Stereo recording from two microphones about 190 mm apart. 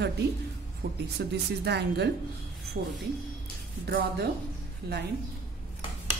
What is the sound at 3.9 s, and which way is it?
Speech, 60° right (ahead or behind).